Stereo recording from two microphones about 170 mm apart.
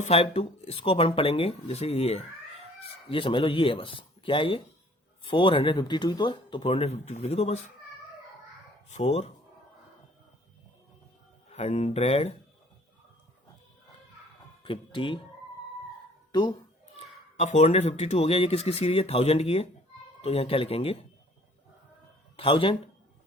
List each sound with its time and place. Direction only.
0.0 s speech: 35° left (ahead or behind)
8.9 s speech: 40° left (ahead or behind)
11.5 s speech: 40° left (ahead or behind)
14.6 s speech: 30° left (ahead or behind)
17.3 s speech: 40° left (ahead or behind)
22.4 s speech: 30° left (ahead or behind)